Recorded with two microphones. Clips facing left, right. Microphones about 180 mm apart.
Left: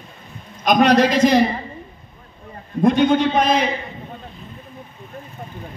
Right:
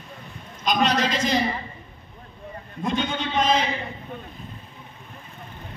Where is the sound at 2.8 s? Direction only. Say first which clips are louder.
Left 11 dB; 65° left (ahead or behind).